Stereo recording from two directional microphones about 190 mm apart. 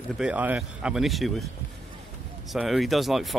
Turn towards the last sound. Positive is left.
turn(degrees=0)  # may be behind; listen again after turning